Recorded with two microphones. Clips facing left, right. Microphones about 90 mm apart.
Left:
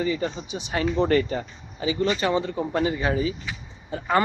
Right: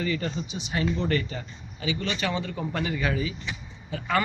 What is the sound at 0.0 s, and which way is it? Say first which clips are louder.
A man's voice: left 3 dB; 15° left (ahead or behind).